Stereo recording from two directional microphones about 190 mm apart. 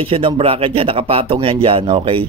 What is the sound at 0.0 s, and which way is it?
Speech, 30° right (ahead or behind).